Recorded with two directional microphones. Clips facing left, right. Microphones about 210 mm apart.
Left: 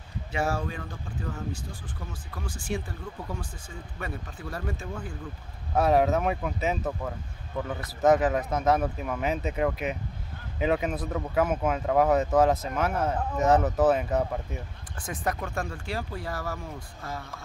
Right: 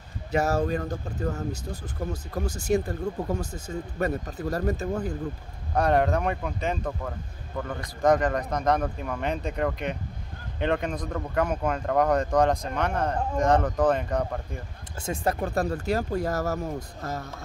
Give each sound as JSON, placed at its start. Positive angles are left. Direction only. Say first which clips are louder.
{"t": 0.3, "sound": "speech", "louder": "right 6 dB", "side_deg": -40}
{"t": 5.8, "sound": "speech", "louder": "even", "side_deg": 5}
{"t": 15.0, "sound": "speech", "louder": "right 4 dB", "side_deg": -25}
{"t": 15.4, "sound": "speech", "louder": "right 7 dB", "side_deg": -35}